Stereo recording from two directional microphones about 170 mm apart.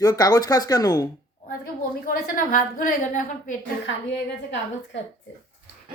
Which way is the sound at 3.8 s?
90° left.